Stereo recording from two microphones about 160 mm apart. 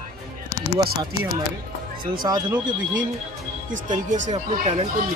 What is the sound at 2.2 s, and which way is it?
Speech, 25° right (ahead or behind).